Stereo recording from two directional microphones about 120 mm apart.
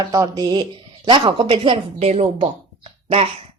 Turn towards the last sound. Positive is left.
turn(degrees=-55)  # may be behind; listen again after turning